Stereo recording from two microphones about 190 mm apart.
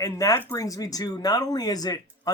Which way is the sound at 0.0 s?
15° left (ahead or behind).